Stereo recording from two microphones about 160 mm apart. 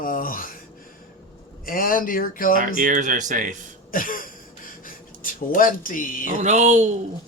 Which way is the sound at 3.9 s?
60° left (ahead or behind).